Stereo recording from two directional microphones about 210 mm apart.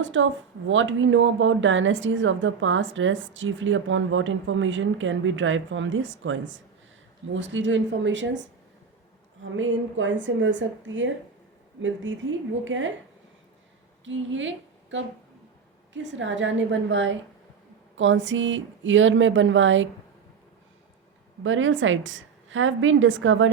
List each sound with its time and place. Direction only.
0.0 s a woman's voice: 65° right (ahead or behind)
9.4 s a woman's voice: 65° right (ahead or behind)
14.0 s a woman's voice: 65° right (ahead or behind)
21.4 s a woman's voice: 65° right (ahead or behind)